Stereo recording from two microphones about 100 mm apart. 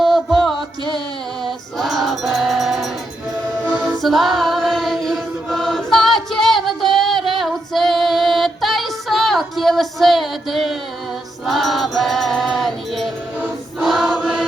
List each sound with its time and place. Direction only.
0.0 s music: centre (ahead or behind)
1.8 s music: centre (ahead or behind)
3.6 s music: 15° right (ahead or behind)
3.9 s choir: centre (ahead or behind)
11.4 s music: centre (ahead or behind)
13.8 s choir: centre (ahead or behind)